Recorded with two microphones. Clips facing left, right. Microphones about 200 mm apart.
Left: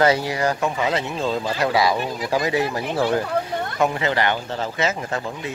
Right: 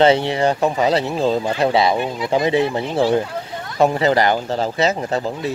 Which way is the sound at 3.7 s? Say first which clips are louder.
Right 7 dB; 35° right (ahead or behind).